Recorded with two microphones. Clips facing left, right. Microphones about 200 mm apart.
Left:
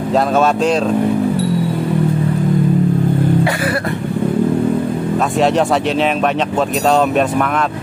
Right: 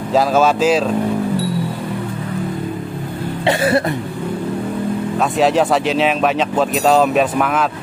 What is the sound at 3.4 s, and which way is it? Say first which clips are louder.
Cough: right 3 dB; 25° right (ahead or behind).